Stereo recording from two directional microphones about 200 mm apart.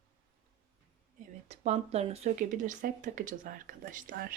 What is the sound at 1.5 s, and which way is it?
Speech, 35° right (ahead or behind).